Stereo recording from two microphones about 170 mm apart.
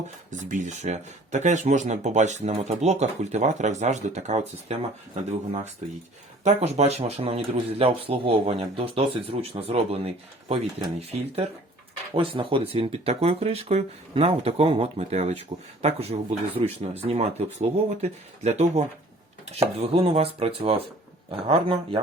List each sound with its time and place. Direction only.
0.3 s speech: 45° right (ahead or behind)
12.1 s speech: 30° right (ahead or behind)